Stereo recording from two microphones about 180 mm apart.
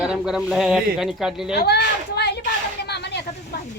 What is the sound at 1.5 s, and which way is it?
Speech, 65° left (ahead or behind).